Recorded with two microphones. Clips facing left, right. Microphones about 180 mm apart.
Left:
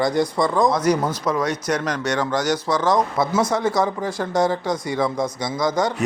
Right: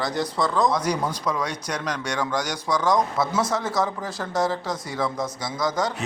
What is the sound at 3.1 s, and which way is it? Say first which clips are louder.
Speech: left 4 dB; 15° left (ahead or behind).